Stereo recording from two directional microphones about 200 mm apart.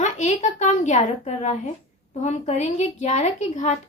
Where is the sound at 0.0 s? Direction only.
35° left (ahead or behind).